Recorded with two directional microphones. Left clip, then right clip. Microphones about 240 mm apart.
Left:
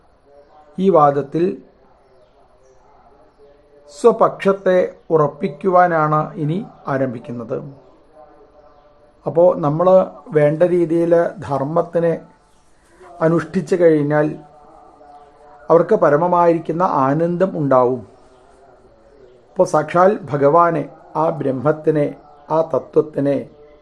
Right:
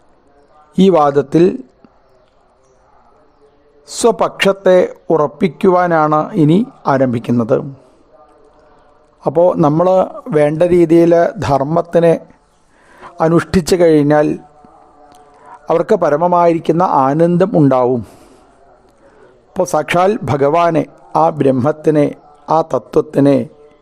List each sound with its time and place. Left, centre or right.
0.8 s speech: right
3.8 s speech: right
9.2 s speech: right
15.6 s speech: right
19.5 s speech: right